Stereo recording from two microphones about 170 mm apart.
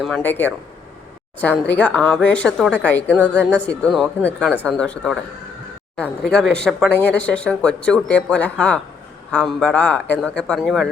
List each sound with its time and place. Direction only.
0.0 s a woman's voice: 5° left (ahead or behind)
3.3 s speech: 90° left
3.7 s a woman's voice: 5° left (ahead or behind)
6.9 s speech: 90° left
7.2 s a woman's voice: 5° left (ahead or behind)